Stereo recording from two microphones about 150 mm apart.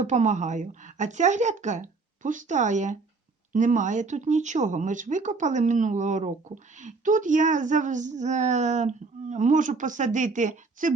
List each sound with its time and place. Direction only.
0.0 s a woman's voice: 50° right (ahead or behind)